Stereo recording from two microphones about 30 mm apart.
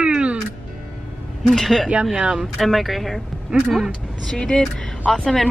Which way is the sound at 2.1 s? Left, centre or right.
Right.